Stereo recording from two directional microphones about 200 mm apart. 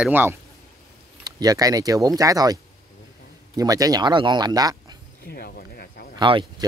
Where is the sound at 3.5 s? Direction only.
15° right (ahead or behind).